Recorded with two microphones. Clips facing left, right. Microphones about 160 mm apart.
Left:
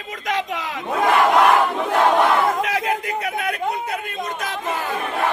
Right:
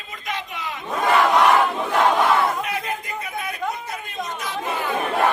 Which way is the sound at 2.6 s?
90° left.